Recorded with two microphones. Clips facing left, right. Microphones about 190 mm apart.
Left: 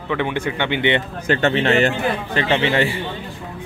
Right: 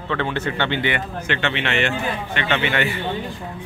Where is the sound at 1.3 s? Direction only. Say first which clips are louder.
Left 7 dB; 40° left (ahead or behind).